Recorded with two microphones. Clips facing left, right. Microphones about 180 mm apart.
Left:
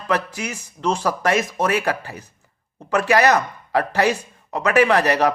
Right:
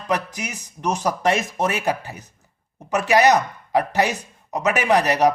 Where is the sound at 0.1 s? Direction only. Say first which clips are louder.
Left 2 dB; 20° right (ahead or behind).